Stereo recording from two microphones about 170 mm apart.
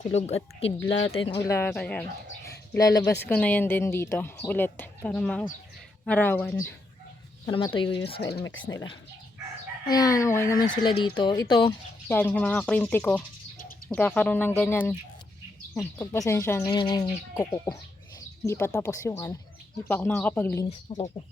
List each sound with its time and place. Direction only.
0.0 s speech: 40° left (ahead or behind)
1.4 s speech: 15° left (ahead or behind)
3.2 s speech: 10° left (ahead or behind)
7.4 s speech: 25° left (ahead or behind)
9.8 s speech: 20° left (ahead or behind)
12.0 s speech: 10° left (ahead or behind)
16.7 s speech: 25° left (ahead or behind)
20.7 s speech: 35° left (ahead or behind)